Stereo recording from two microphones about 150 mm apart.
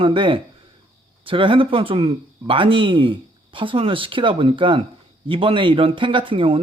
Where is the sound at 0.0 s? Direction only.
35° right (ahead or behind).